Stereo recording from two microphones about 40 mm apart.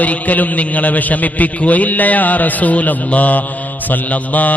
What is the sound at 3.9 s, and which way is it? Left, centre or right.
Mantra, left.